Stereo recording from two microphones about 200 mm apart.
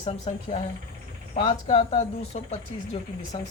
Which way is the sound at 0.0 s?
30° left (ahead or behind).